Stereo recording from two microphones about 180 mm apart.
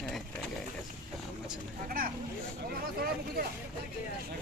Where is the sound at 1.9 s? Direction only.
55° right (ahead or behind).